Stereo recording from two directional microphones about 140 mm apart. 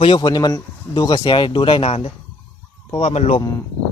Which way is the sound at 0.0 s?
30° left (ahead or behind).